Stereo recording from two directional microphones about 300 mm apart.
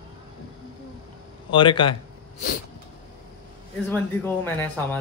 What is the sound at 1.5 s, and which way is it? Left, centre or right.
Speech, centre.